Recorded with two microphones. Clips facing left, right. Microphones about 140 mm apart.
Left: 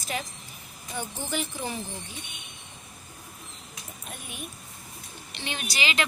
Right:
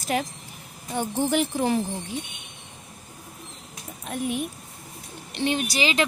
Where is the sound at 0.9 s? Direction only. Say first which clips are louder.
Right 9 dB; 65° right (ahead or behind).